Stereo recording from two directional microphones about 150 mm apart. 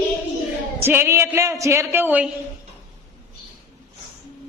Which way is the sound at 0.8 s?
15° right (ahead or behind).